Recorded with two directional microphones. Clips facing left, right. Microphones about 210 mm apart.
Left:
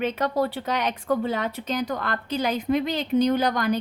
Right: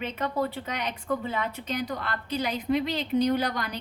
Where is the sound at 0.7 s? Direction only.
90° left.